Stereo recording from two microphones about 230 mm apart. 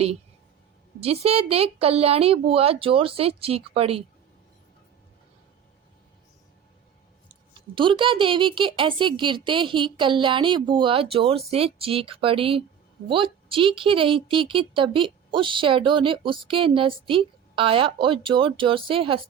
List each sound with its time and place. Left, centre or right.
1.0 s a woman's voice: right
7.8 s a woman's voice: right